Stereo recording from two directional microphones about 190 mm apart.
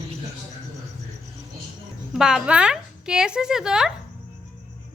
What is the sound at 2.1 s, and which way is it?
Speech, 5° right (ahead or behind).